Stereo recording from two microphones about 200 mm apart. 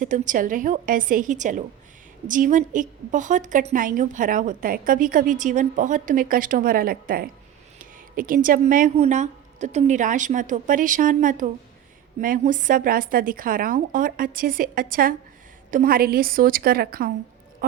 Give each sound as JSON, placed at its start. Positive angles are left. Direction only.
{"t": 0.0, "sound": "a woman's voice", "side_deg": -40}